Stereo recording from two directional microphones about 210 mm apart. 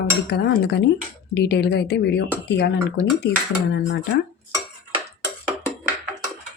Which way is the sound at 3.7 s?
55° left (ahead or behind).